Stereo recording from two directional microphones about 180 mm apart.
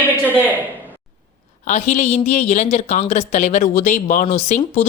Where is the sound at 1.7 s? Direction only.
40° left (ahead or behind).